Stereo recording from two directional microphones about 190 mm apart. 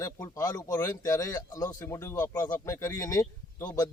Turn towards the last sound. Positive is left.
turn(degrees=20)  # may be behind; listen again after turning